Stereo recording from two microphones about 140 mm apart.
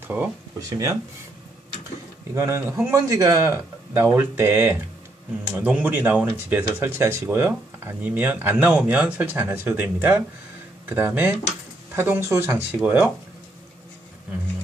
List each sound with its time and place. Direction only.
0.1 s speech: 15° right (ahead or behind)
2.3 s a man's voice: 20° right (ahead or behind)